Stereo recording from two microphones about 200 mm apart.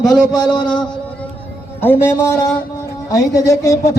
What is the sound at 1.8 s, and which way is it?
A man's voice, 10° left (ahead or behind).